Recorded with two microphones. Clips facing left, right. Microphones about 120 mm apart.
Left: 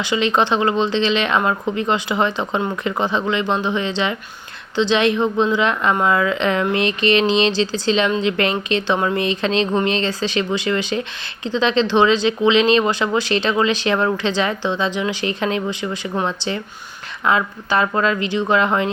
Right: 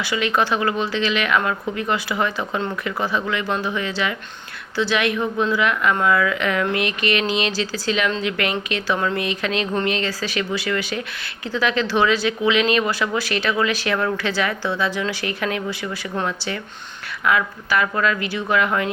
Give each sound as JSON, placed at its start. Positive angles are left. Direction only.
{"t": 0.0, "sound": "speech", "side_deg": 25}